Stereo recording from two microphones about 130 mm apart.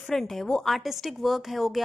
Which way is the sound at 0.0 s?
5° left (ahead or behind).